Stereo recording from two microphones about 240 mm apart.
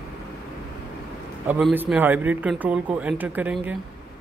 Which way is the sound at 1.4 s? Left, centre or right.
Centre.